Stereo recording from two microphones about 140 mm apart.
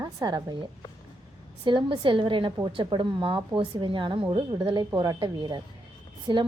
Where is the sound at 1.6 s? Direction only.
35° right (ahead or behind).